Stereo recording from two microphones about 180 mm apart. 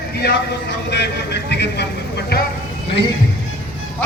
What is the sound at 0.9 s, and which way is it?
Vehicle, 70° left (ahead or behind).